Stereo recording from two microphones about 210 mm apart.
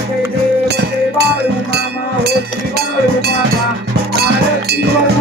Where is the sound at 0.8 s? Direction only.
50° right (ahead or behind).